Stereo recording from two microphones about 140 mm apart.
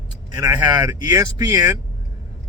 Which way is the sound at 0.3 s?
30° right (ahead or behind).